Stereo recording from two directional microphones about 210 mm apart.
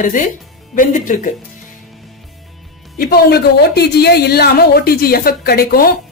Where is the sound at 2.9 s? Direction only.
50° left (ahead or behind).